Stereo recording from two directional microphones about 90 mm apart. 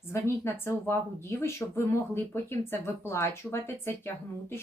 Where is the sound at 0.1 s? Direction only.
30° left (ahead or behind).